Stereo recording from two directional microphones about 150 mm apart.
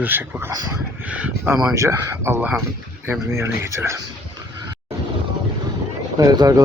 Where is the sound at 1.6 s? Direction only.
20° right (ahead or behind).